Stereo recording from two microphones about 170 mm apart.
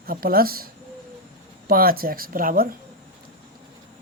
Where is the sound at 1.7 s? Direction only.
60° right (ahead or behind).